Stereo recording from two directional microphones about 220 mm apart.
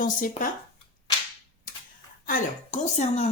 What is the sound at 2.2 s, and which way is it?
Speech, 30° left (ahead or behind).